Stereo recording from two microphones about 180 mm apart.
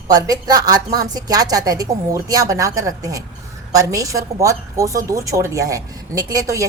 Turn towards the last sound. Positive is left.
turn(degrees=-20)  # may be behind; listen again after turning